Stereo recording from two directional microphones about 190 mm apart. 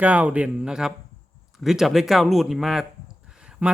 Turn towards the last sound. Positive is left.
turn(degrees=-5)  # may be behind; listen again after turning